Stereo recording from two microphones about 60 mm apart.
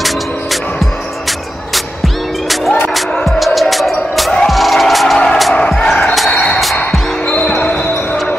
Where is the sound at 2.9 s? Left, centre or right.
Centre.